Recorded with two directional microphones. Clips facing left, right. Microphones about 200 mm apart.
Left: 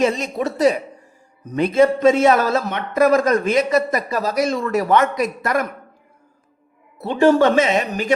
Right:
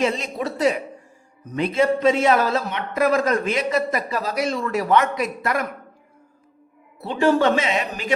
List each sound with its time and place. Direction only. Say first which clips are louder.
0.0 s a man's voice: left 4 dB; 45° left (ahead or behind)
7.0 s a man's voice: left 4 dB; 50° left (ahead or behind)